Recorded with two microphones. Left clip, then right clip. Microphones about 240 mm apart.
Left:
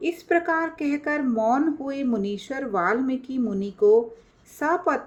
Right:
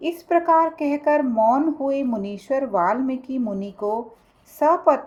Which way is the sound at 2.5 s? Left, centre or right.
Right.